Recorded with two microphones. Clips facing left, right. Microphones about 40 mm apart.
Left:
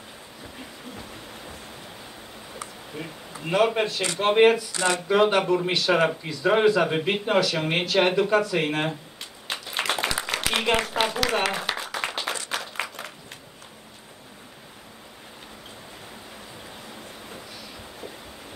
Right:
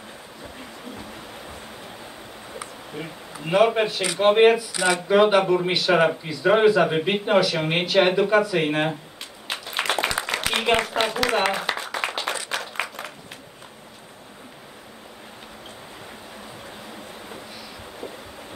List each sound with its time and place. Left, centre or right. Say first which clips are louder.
0.9 s music: right 2 dB; centre
2.5 s speech: right 2 dB; centre
4.7 s speech: right 2 dB; right
5.0 s speech: right 4 dB; centre
9.5 s a sound: right 2 dB; centre